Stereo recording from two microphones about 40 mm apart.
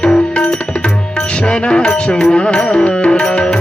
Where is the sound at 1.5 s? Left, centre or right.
Left.